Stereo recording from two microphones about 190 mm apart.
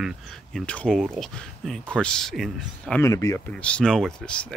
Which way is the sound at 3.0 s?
15° left (ahead or behind).